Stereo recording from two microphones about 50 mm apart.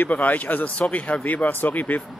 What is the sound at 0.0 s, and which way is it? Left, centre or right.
Speech, left.